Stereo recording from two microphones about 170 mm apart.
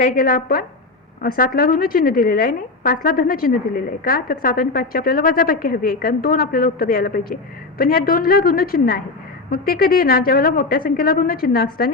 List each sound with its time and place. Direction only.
0.0 s a woman's voice: 55° left (ahead or behind)